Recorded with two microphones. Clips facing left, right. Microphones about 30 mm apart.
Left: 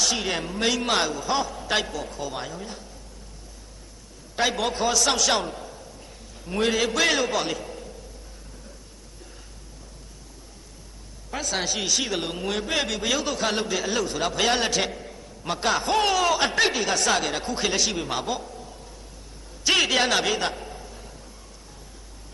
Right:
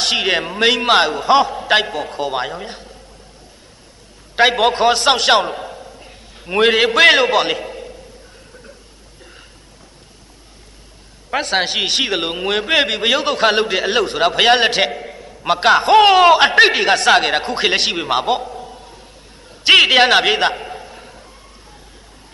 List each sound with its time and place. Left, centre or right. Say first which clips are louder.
0.0 s a man's voice: right 9 dB; right
4.4 s a man's voice: right 11 dB; right
11.2 s a man's voice: right 10 dB; right
19.5 s a sound: right 11 dB; right